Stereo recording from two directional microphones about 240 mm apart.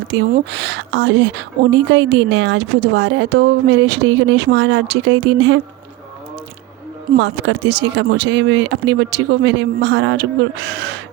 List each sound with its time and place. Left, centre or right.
0.3 s a woman's voice: right
7.2 s a woman's voice: right